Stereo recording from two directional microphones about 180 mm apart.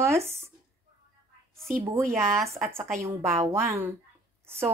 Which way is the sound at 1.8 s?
15° right (ahead or behind).